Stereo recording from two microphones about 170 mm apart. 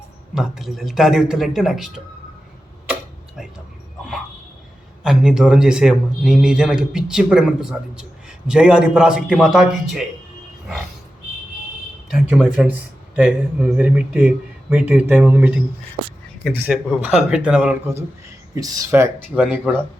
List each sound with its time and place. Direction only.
0.3 s a man's voice: 5° right (ahead or behind)
2.9 s tick-tock: 5° right (ahead or behind)
5.0 s a man's voice: 5° right (ahead or behind)
12.0 s a man's voice: 5° right (ahead or behind)
17.9 s speech: 15° right (ahead or behind)